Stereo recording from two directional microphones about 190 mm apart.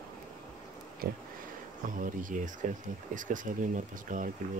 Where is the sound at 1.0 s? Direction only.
50° right (ahead or behind).